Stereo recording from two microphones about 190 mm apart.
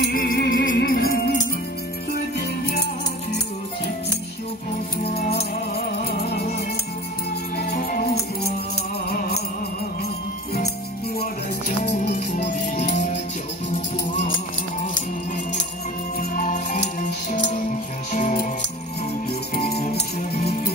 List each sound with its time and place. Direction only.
0.0 s music: 50° left (ahead or behind)
5.1 s music: 55° left (ahead or behind)
16.2 s music: 45° left (ahead or behind)
19.5 s music: 55° left (ahead or behind)